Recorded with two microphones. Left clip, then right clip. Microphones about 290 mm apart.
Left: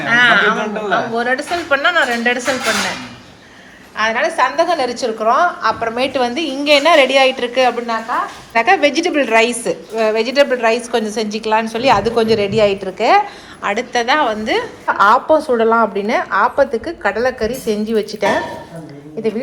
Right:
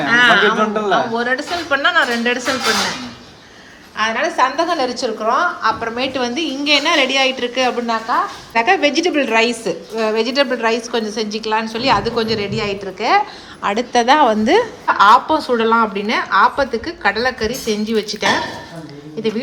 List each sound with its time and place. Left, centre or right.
0.1 s speech: centre
0.6 s a man's voice: right
0.9 s a woman's voice: centre
3.9 s a woman's voice: centre
14.8 s a woman's voice: centre